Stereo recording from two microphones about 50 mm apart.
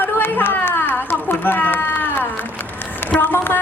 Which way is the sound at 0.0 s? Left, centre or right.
Left.